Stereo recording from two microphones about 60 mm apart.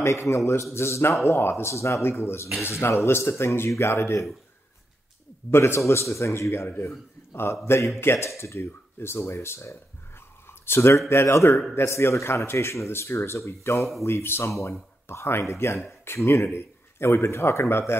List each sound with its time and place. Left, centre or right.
0.0 s a man's voice: left
5.5 s a man's voice: left
15.0 s a man's voice: left
16.4 s a sound: left
17.2 s a man's voice: left